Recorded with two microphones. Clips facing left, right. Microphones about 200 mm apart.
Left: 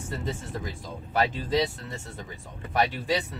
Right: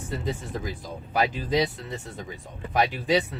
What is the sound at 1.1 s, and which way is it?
Speech, 15° right (ahead or behind).